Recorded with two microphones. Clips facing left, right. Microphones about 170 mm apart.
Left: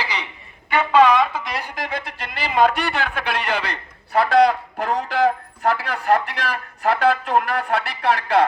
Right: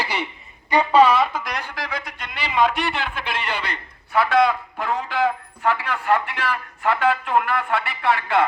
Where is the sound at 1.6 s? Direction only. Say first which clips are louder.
Left 2 dB; 20° left (ahead or behind).